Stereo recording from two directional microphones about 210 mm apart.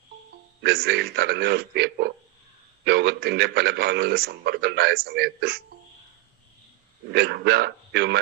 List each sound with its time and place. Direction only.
0.6 s a man's voice: 50° right (ahead or behind)
7.1 s a man's voice: 50° right (ahead or behind)